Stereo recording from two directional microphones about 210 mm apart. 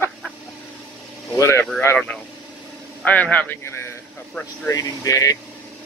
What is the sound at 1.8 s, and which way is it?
A man's voice, 5° left (ahead or behind).